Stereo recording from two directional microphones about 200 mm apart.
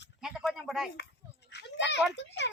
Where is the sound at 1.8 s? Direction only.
60° left (ahead or behind).